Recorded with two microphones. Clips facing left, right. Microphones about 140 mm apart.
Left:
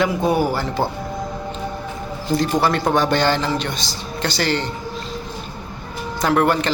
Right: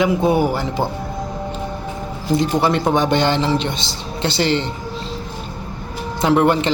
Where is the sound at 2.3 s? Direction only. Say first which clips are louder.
Right 2 dB; 20° right (ahead or behind).